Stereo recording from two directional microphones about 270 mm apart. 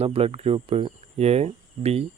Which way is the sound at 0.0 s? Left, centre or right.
Right.